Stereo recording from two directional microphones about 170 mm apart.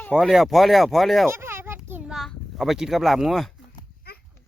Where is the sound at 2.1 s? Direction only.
Centre (ahead or behind).